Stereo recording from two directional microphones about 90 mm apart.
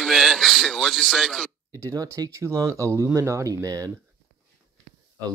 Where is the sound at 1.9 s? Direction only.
40° right (ahead or behind).